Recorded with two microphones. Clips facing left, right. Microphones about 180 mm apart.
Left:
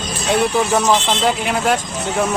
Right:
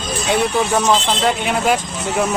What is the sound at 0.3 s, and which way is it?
Speech, centre (ahead or behind).